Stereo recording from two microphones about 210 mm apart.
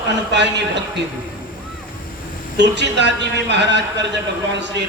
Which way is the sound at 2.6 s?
55° right (ahead or behind).